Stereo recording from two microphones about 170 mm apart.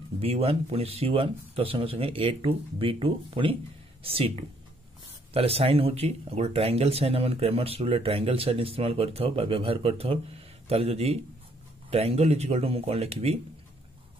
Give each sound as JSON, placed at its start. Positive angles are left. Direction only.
{"t": 0.2, "sound": "speech", "side_deg": -35}